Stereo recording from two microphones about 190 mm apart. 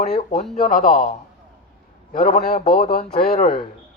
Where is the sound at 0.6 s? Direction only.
45° left (ahead or behind).